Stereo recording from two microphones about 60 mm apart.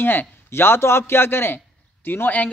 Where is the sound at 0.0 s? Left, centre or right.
Left.